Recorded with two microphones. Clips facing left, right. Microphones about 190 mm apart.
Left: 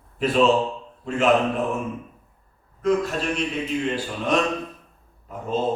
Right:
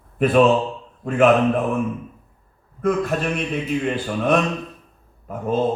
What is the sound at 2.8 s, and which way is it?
Speech, 55° right (ahead or behind).